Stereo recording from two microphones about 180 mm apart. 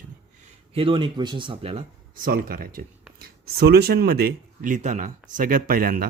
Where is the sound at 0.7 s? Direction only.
30° right (ahead or behind).